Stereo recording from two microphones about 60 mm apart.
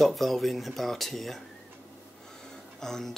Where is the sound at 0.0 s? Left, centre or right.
Centre.